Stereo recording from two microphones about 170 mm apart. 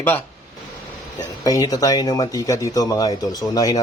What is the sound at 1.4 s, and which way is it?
Speech, 20° left (ahead or behind).